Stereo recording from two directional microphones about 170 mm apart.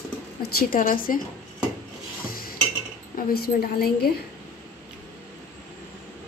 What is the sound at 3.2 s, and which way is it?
Speech, 60° left (ahead or behind).